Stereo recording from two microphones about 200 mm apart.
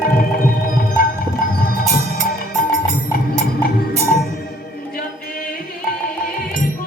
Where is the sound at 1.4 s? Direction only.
45° left (ahead or behind).